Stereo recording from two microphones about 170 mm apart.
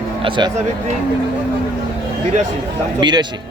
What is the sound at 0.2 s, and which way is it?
Speech, 30° right (ahead or behind).